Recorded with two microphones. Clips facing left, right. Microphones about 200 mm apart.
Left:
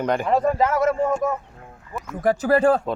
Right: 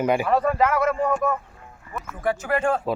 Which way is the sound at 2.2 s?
35° left (ahead or behind).